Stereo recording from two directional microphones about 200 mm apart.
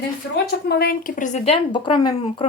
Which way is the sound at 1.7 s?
20° left (ahead or behind).